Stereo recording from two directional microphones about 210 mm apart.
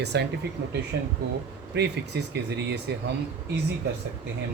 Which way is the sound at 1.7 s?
50° right (ahead or behind).